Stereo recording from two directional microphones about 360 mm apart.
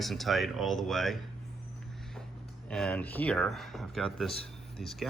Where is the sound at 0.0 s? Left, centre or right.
Centre.